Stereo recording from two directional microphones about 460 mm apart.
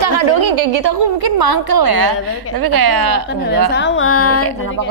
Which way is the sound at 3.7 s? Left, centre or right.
Left.